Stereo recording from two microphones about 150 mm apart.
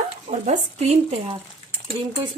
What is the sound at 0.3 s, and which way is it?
A woman's voice, 50° right (ahead or behind).